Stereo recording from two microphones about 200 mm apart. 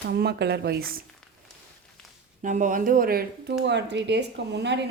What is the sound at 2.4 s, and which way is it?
Speech, 40° right (ahead or behind).